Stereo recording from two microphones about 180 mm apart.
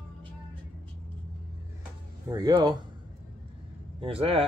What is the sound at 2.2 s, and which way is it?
Speech, 20° right (ahead or behind).